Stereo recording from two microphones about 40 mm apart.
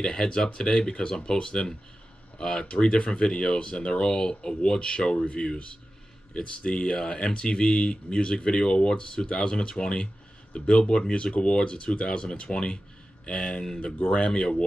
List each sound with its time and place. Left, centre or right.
0.0 s speech: centre